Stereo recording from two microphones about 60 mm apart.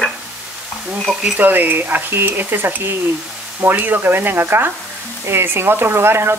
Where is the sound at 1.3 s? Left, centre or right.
Right.